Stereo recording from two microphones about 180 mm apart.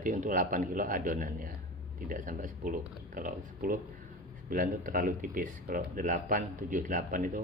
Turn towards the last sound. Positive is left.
turn(degrees=-50)  # may be behind; listen again after turning